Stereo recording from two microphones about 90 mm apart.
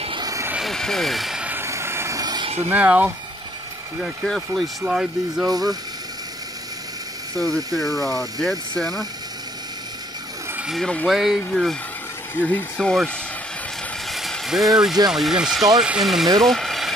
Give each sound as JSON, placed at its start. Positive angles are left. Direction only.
{"t": 0.2, "sound": "vehicle", "side_deg": -40}
{"t": 0.6, "sound": "a sound", "side_deg": 5}
{"t": 1.6, "sound": "vehicle", "side_deg": -30}
{"t": 2.1, "sound": "a sound", "side_deg": -50}
{"t": 2.7, "sound": "speech", "side_deg": -15}
{"t": 4.0, "sound": "speech", "side_deg": 0}
{"t": 4.8, "sound": "speech", "side_deg": -10}
{"t": 7.3, "sound": "speech", "side_deg": 0}
{"t": 10.7, "sound": "speech", "side_deg": 5}
{"t": 12.4, "sound": "speech", "side_deg": 20}
{"t": 12.7, "sound": "speech", "side_deg": 5}
{"t": 14.1, "sound": "a sound", "side_deg": 0}
{"t": 15.0, "sound": "speech", "side_deg": -5}
{"t": 16.3, "sound": "vehicle", "side_deg": 5}